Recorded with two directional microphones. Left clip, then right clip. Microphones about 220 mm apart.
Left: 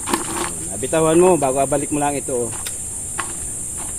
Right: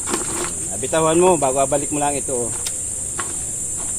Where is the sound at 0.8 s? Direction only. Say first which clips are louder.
Left 1 dB; 30° left (ahead or behind).